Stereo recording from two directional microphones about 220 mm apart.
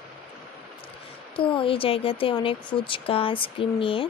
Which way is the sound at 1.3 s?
25° left (ahead or behind).